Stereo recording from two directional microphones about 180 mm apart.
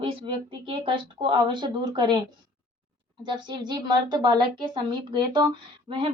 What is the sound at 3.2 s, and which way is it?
A woman's voice, 25° right (ahead or behind).